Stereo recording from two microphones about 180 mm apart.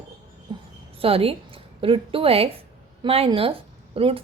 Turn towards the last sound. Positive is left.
turn(degrees=-30)  # may be behind; listen again after turning